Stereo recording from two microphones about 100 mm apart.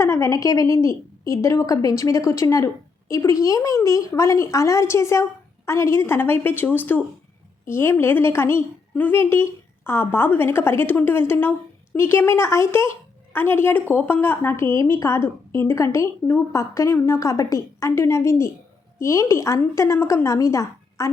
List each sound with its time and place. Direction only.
0.0 s a woman's voice: 30° left (ahead or behind)